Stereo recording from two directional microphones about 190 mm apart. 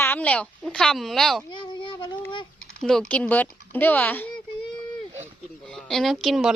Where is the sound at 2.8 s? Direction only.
5° left (ahead or behind).